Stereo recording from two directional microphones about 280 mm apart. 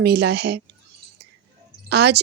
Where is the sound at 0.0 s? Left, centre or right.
Right.